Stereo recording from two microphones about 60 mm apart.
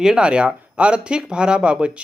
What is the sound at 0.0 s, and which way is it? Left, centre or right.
Speech, centre.